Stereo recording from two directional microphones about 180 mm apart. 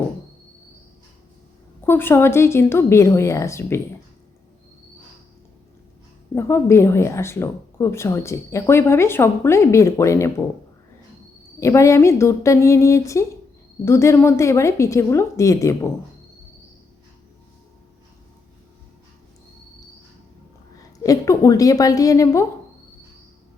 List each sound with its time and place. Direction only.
1.8 s speech: 10° left (ahead or behind)
6.3 s speech: 15° left (ahead or behind)
11.6 s speech: 15° left (ahead or behind)
21.0 s a woman's voice: 20° left (ahead or behind)